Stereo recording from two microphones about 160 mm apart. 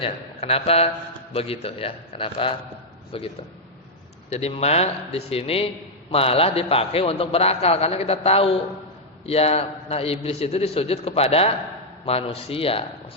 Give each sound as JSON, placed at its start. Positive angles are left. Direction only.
{"t": 0.0, "sound": "a man's voice", "side_deg": 40}